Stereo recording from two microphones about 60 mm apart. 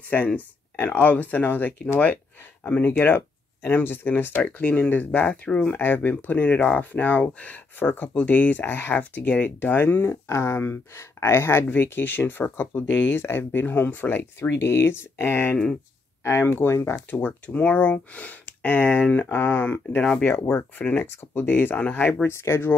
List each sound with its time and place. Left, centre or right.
0.1 s speech: left
2.9 s speech: left
4.4 s speech: left
5.7 s speech: left
8.9 s speech: left
10.0 s speech: left
15.5 s speech: centre
16.3 s speech: left
17.1 s speech: left
20.0 s speech: centre
20.2 s speech: left
22.3 s speech: left